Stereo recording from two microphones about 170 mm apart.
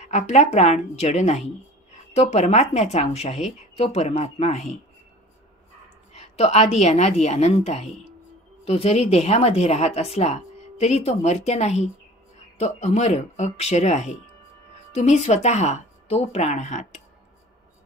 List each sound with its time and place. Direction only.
0.0 s speech: 45° left (ahead or behind)
6.1 s speech: 40° left (ahead or behind)